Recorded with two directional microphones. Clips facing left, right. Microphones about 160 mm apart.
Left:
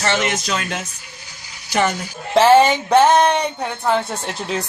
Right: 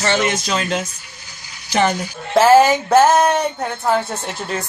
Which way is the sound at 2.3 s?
Centre (ahead or behind).